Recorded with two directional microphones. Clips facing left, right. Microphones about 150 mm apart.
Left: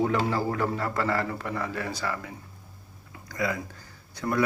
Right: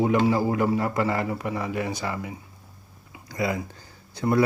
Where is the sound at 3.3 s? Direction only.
25° right (ahead or behind).